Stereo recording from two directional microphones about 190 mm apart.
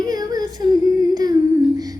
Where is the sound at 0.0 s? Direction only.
20° right (ahead or behind).